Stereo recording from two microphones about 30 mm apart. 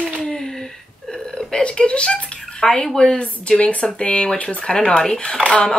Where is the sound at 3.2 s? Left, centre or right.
Left.